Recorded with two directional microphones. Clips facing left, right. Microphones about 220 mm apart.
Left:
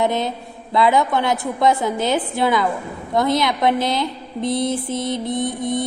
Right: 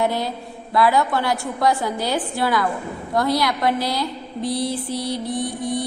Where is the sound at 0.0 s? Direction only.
20° left (ahead or behind).